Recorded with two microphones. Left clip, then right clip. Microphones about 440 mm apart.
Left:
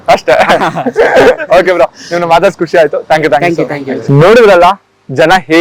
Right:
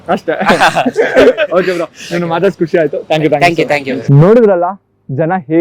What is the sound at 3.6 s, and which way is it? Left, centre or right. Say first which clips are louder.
Speech: right 2 dB; right.